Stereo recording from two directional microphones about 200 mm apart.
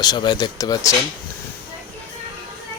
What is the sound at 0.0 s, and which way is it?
Speech, 20° left (ahead or behind).